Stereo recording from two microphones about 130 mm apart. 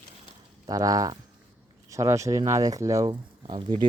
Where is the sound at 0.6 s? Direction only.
25° right (ahead or behind).